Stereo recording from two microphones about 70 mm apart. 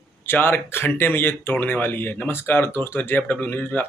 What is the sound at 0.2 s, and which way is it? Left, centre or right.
Speech, left.